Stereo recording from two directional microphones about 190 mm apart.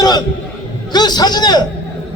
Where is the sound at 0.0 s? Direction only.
20° left (ahead or behind).